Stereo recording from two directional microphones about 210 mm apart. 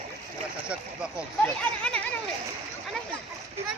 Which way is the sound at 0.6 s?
5° right (ahead or behind).